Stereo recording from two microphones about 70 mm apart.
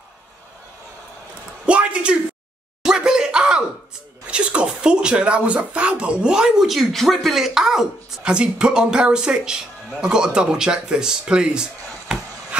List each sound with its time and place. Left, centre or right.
1.7 s speech: centre
2.8 s a sound: centre
4.3 s speech: centre